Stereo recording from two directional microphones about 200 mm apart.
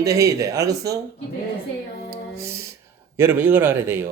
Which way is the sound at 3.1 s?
10° right (ahead or behind).